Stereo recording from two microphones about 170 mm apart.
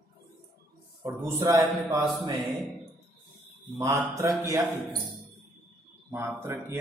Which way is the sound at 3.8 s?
15° right (ahead or behind).